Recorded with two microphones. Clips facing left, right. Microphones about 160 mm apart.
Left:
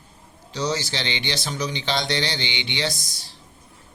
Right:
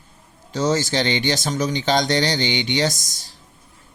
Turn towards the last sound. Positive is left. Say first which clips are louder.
# right 5 dB
turn(degrees=-45)  # may be behind; listen again after turning